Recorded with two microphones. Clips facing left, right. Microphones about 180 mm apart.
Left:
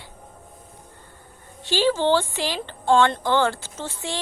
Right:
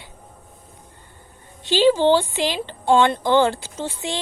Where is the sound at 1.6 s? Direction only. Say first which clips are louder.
Right 5 dB; 20° right (ahead or behind).